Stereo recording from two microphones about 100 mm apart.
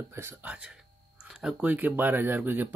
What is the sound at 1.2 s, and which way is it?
Music, 5° right (ahead or behind).